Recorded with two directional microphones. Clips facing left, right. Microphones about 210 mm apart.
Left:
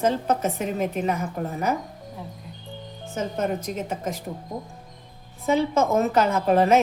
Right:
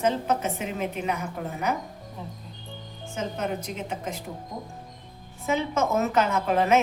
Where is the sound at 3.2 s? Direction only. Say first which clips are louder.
Left 4 dB; 45° left (ahead or behind).